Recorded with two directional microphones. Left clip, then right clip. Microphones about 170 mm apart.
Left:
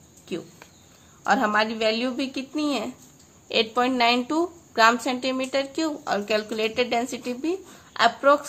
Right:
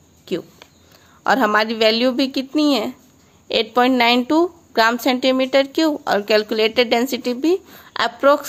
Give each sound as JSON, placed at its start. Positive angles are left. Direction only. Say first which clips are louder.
{"t": 0.3, "sound": "a woman's voice", "louder": "right 8 dB", "side_deg": -55}